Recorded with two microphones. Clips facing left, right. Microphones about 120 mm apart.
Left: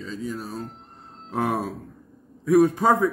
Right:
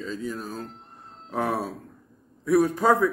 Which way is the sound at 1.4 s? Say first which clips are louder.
Left 2 dB; 15° left (ahead or behind).